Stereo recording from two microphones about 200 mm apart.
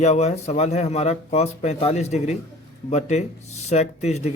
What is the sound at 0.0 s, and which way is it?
A man's voice, 35° left (ahead or behind).